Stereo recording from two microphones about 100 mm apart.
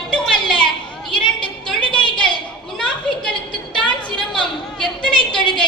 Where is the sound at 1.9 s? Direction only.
50° left (ahead or behind).